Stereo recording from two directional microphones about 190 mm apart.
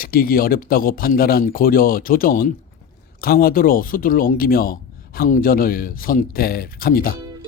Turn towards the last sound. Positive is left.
turn(degrees=50)  # may be behind; listen again after turning